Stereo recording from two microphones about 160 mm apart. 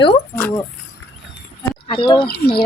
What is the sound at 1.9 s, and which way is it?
Speech, 35° left (ahead or behind).